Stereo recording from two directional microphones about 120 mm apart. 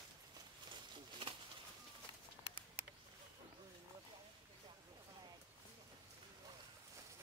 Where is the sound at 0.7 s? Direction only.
50° right (ahead or behind).